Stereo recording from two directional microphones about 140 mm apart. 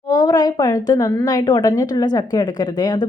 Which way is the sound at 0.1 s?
25° left (ahead or behind).